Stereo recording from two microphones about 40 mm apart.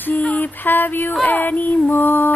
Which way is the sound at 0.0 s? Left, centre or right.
Left.